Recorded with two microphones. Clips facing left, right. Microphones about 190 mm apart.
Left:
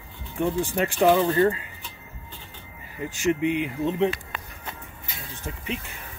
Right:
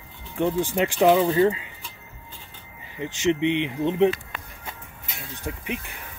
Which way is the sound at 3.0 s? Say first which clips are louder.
Right 1 dB; 20° right (ahead or behind).